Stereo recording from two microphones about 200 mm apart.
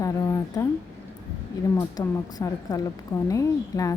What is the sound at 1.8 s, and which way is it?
A woman's voice, 15° left (ahead or behind).